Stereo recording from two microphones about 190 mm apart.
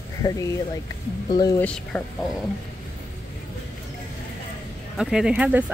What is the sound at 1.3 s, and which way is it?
Speech, 20° left (ahead or behind).